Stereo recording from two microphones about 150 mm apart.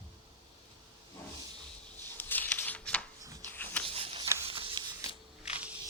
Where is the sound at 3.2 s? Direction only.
20° right (ahead or behind).